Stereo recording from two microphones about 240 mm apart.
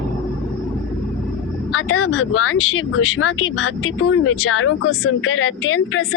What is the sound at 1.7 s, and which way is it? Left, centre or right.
Speech, left.